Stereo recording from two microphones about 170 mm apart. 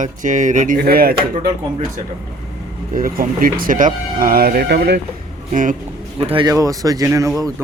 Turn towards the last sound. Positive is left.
turn(degrees=-15)  # may be behind; listen again after turning